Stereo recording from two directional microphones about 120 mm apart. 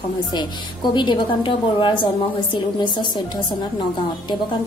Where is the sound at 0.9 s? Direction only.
40° left (ahead or behind).